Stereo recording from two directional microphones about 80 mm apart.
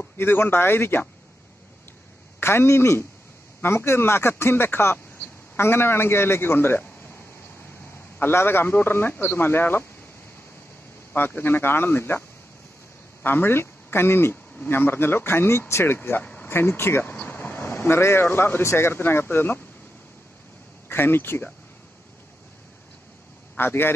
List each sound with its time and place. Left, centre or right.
0.2 s a man's voice: left
2.4 s a man's voice: left
8.2 s a man's voice: left
11.1 s a man's voice: left
16.4 s a man's voice: left
17.1 s speech: centre
20.9 s a man's voice: left
23.5 s a man's voice: left